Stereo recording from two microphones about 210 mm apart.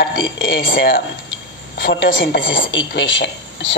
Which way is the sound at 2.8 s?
60° left (ahead or behind).